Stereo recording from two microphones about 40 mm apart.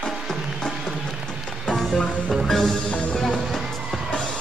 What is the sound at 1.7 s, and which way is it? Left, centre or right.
Music, centre.